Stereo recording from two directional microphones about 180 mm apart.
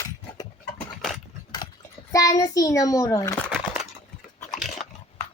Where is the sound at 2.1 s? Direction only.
20° left (ahead or behind).